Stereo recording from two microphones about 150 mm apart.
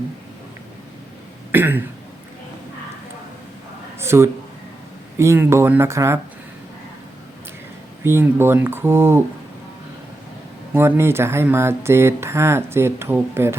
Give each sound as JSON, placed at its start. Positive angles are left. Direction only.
{"t": 1.5, "sound": "speech", "side_deg": -15}
{"t": 4.0, "sound": "speech", "side_deg": -15}
{"t": 8.0, "sound": "speech", "side_deg": -15}
{"t": 10.8, "sound": "speech", "side_deg": -15}